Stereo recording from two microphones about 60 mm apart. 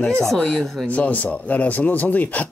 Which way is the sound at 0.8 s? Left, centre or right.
Left.